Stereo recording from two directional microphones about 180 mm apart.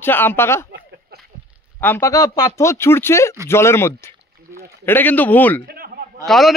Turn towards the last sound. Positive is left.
turn(degrees=0)  # may be behind; listen again after turning